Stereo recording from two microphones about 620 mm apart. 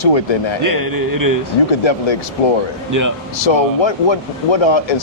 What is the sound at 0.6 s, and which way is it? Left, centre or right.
Speech, right.